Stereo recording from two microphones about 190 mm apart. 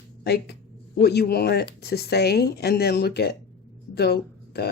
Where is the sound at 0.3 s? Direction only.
55° left (ahead or behind).